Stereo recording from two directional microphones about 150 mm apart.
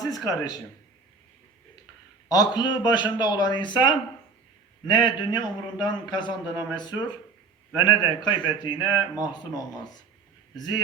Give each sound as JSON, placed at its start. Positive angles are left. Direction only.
{"t": 0.0, "sound": "speech", "side_deg": 25}
{"t": 2.3, "sound": "a man's voice", "side_deg": 25}
{"t": 6.4, "sound": "speech", "side_deg": -15}
{"t": 6.7, "sound": "a man's voice", "side_deg": 30}
{"t": 8.7, "sound": "speech", "side_deg": -15}
{"t": 9.1, "sound": "a man's voice", "side_deg": 25}